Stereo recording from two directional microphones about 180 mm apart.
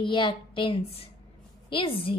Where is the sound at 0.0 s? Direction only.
25° left (ahead or behind).